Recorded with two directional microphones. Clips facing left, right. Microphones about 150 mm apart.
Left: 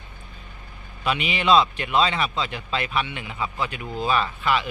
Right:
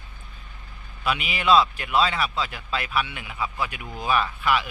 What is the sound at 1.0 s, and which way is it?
A man's voice, 5° right (ahead or behind).